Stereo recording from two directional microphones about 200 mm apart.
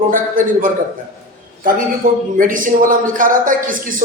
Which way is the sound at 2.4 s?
40° right (ahead or behind).